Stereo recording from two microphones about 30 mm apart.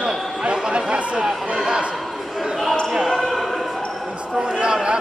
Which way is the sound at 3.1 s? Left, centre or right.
Centre.